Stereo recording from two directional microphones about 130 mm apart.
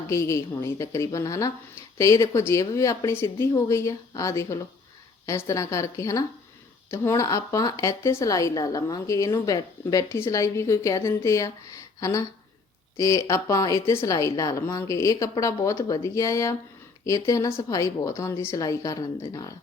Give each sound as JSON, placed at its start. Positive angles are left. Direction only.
{"t": 0.1, "sound": "a woman's voice", "side_deg": 25}